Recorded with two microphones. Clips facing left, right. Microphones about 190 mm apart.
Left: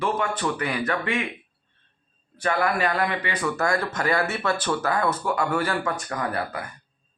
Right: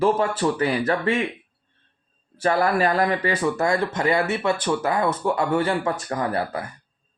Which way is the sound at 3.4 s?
20° right (ahead or behind).